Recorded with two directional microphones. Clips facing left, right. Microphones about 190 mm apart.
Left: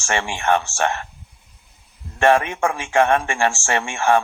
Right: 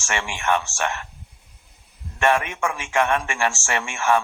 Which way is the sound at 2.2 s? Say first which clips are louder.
Left 4 dB; 30° left (ahead or behind).